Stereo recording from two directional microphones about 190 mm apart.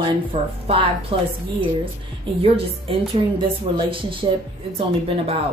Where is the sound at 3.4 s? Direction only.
25° right (ahead or behind).